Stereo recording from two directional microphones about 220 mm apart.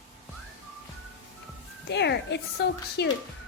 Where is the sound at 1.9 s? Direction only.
50° left (ahead or behind).